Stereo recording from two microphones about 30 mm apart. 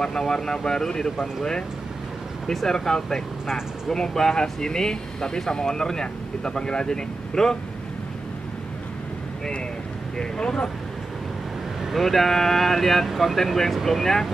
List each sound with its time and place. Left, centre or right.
0.2 s speech: centre
2.7 s speech: centre
10.1 s speech: left
11.9 s speech: centre
13.1 s speech: centre